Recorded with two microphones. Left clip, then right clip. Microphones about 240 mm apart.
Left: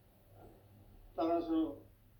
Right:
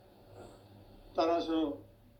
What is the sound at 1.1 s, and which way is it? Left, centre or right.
Speech, right.